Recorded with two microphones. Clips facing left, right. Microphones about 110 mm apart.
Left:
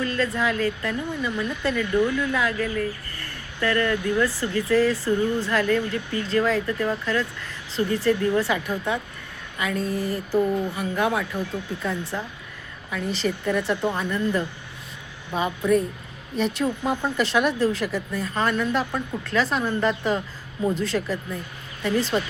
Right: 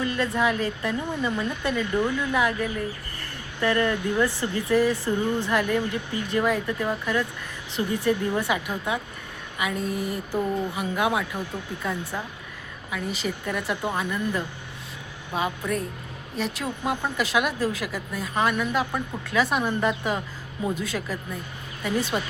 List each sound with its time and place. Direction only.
0.0 s speech: 20° right (ahead or behind)